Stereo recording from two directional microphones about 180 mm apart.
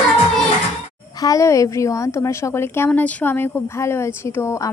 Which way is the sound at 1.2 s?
20° left (ahead or behind).